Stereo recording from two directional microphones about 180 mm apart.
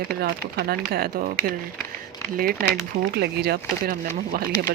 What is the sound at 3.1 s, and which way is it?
Speech, 65° right (ahead or behind).